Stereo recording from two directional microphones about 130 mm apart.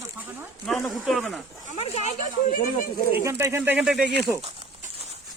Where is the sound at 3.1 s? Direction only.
15° right (ahead or behind).